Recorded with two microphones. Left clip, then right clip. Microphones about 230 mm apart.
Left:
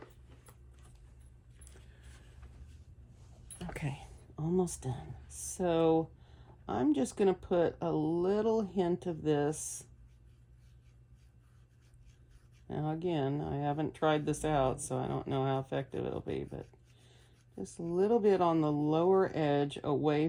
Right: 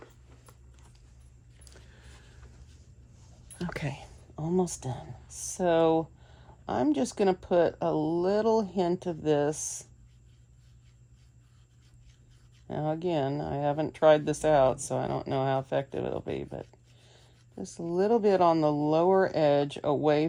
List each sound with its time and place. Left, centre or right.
3.8 s speech: right
5.3 s a sound: centre
5.5 s speech: right
12.6 s speech: right
17.9 s speech: right